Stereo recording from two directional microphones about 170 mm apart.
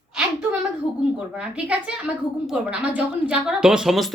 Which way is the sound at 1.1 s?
5° right (ahead or behind).